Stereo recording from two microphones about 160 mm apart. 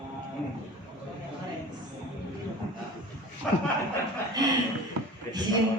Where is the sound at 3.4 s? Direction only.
5° left (ahead or behind).